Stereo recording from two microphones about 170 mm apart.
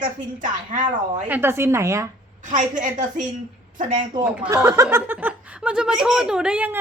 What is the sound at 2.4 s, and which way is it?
A woman's voice, 50° right (ahead or behind).